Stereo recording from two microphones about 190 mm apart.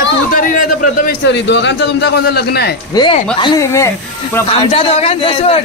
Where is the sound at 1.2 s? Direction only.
65° left (ahead or behind).